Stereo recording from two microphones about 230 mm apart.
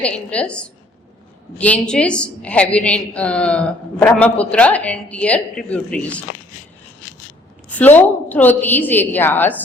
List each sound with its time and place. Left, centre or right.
0.0 s a woman's voice: centre
7.8 s a woman's voice: centre